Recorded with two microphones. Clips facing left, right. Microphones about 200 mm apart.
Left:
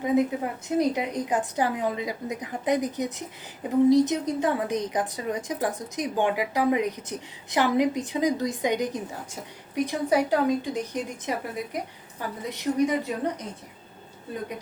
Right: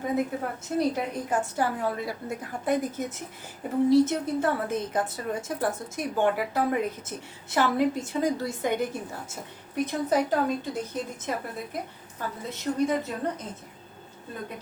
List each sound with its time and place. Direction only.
0.0 s a woman's voice: 15° left (ahead or behind)